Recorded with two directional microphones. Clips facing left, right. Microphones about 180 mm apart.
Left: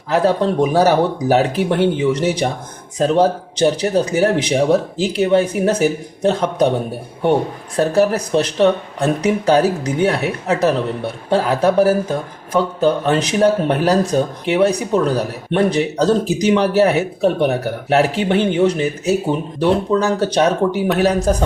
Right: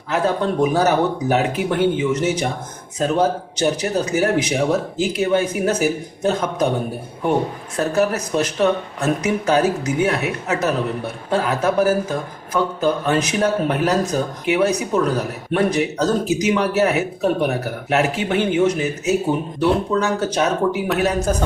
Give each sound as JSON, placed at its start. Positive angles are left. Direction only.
{"t": 0.1, "sound": "speech", "side_deg": 35}
{"t": 7.8, "sound": "speech", "side_deg": 30}